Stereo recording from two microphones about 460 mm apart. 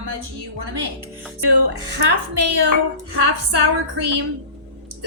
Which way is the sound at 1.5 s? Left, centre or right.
Right.